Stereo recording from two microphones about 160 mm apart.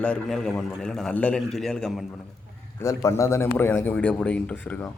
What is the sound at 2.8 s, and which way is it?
A man's voice, 15° left (ahead or behind).